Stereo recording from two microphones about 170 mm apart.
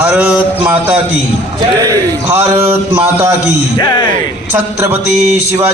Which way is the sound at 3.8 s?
25° left (ahead or behind).